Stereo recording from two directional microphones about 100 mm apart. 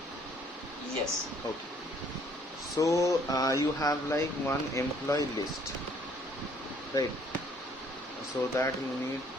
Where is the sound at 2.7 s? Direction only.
30° left (ahead or behind).